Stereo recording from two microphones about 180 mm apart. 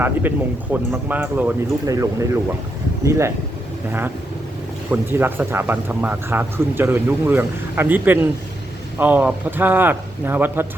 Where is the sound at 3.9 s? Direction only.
10° right (ahead or behind).